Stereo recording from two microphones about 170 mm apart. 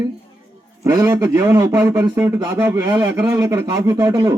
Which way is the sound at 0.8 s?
20° right (ahead or behind).